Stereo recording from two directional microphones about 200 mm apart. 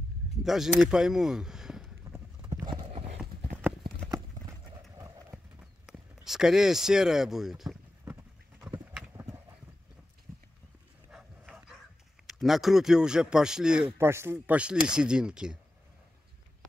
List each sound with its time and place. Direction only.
0.4 s speech: centre (ahead or behind)
0.7 s a sound: centre (ahead or behind)
2.1 s clip-clop: 10° right (ahead or behind)
2.6 s clip-clop: 25° right (ahead or behind)
4.9 s clip-clop: 10° right (ahead or behind)
8.0 s clip-clop: 15° right (ahead or behind)
11.1 s dog: 5° right (ahead or behind)
12.3 s speech: centre (ahead or behind)